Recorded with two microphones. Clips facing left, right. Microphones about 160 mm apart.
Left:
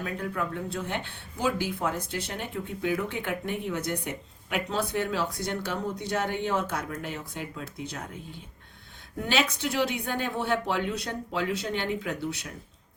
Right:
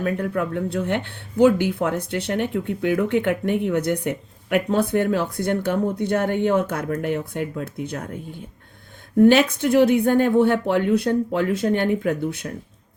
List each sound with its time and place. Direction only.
0.0 s speech: 60° right (ahead or behind)